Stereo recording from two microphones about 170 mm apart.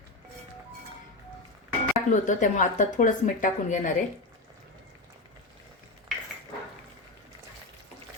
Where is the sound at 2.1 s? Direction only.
45° left (ahead or behind).